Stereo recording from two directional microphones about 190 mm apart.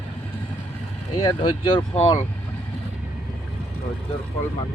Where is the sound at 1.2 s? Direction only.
25° left (ahead or behind).